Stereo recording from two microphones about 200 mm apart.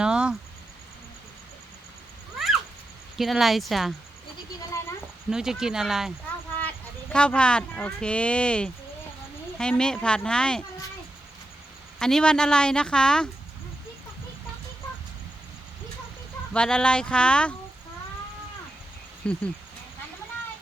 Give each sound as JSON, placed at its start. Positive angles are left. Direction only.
{"t": 0.0, "sound": "a sound", "side_deg": -5}
{"t": 3.2, "sound": "speech", "side_deg": 0}
{"t": 5.3, "sound": "speech", "side_deg": -5}
{"t": 11.9, "sound": "speech", "side_deg": 5}
{"t": 16.5, "sound": "speech", "side_deg": 5}
{"t": 19.2, "sound": "speech", "side_deg": 5}